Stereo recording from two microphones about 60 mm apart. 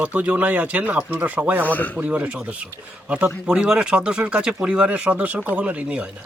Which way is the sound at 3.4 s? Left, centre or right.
Centre.